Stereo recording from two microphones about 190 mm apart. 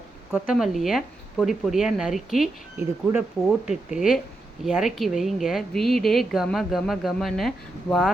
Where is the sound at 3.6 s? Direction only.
5° right (ahead or behind).